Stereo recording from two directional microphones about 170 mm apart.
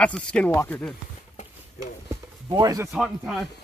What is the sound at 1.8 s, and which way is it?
Speech, 20° right (ahead or behind).